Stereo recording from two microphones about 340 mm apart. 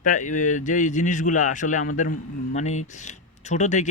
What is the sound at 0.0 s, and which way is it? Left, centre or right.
Speech, left.